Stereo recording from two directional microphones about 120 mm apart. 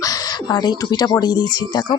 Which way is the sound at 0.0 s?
30° left (ahead or behind).